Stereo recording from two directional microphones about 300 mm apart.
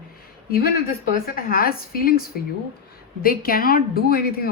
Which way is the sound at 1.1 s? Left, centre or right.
Left.